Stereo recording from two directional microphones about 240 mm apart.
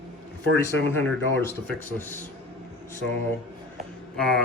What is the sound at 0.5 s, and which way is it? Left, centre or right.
Speech, centre.